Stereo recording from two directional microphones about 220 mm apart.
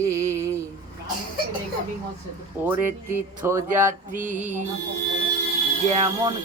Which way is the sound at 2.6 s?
10° right (ahead or behind).